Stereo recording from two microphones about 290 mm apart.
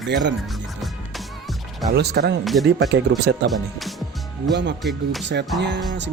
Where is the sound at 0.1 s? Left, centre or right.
Right.